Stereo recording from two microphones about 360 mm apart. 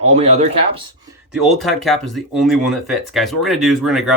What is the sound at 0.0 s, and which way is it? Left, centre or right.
Speech, centre.